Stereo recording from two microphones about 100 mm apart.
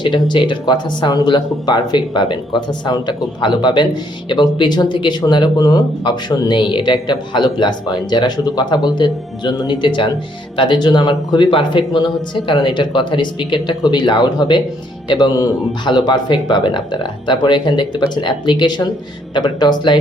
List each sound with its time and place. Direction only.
0.0 s speech: 50° left (ahead or behind)
6.5 s speech: 55° left (ahead or behind)